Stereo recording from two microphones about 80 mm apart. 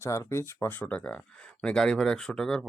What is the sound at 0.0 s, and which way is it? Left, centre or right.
Speech, left.